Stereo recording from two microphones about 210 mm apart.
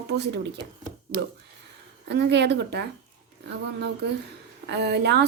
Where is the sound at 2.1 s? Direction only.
55° right (ahead or behind).